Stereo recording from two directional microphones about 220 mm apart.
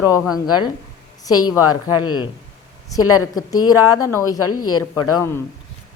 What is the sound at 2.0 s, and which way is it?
Speech, 20° left (ahead or behind).